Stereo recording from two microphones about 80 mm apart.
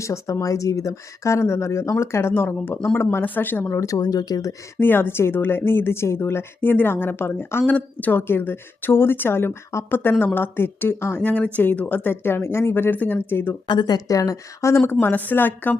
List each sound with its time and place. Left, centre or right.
0.0 s a woman's voice: left
3.8 s a woman's voice: left
4.8 s a woman's voice: left
13.7 s a woman's voice: left
15.0 s a woman's voice: left